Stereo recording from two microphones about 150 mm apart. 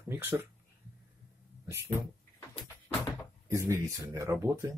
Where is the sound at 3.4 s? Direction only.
20° right (ahead or behind).